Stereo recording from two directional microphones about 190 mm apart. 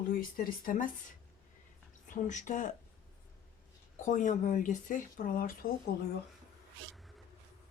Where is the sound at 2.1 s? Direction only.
40° left (ahead or behind).